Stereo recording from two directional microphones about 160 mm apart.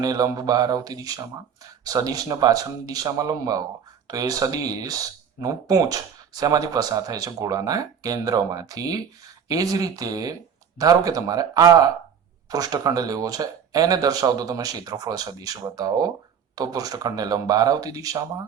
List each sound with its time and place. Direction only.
0.0 s speech: 25° right (ahead or behind)